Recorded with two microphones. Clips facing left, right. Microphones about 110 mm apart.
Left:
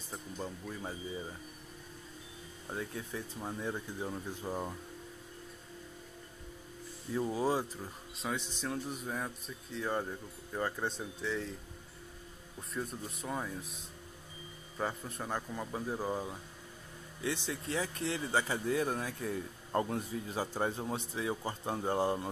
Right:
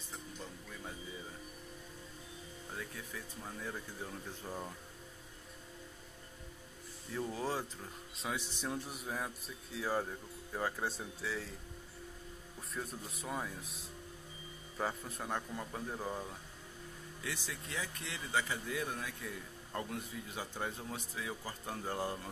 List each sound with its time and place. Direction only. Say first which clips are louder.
0.4 s speech: left 7 dB; 35° left (ahead or behind)
2.7 s speech: left 7 dB; 25° left (ahead or behind)
7.2 s speech: left 6 dB; 15° left (ahead or behind)
8.2 s speech: left 3 dB; 5° right (ahead or behind)
8.5 s speech: left 3 dB; 15° right (ahead or behind)
12.7 s speech: left 4 dB; centre (ahead or behind)
14.8 s speech: left 2 dB; centre (ahead or behind)
17.2 s speech: left 8 dB; 25° left (ahead or behind)